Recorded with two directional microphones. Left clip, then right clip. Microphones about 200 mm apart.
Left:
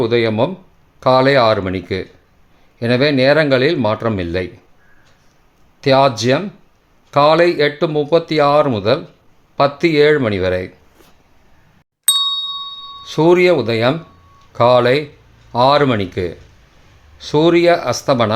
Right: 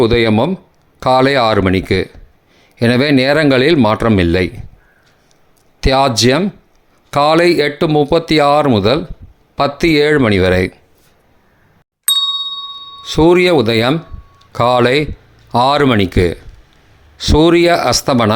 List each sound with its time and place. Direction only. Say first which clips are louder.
0.0 s speech: right 3 dB; 35° right (ahead or behind)
5.8 s speech: right 1 dB; 35° right (ahead or behind)
12.0 s ding: right 1 dB; centre (ahead or behind)
13.0 s speech: right 2 dB; 25° right (ahead or behind)